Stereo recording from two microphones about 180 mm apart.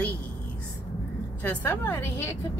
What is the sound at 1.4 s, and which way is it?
Speech, 10° left (ahead or behind).